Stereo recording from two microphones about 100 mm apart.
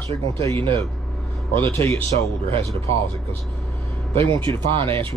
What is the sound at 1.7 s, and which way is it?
Speech, 20° left (ahead or behind).